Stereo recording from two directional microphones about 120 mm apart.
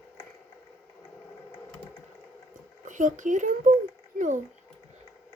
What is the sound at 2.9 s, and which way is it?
Speech, 90° right.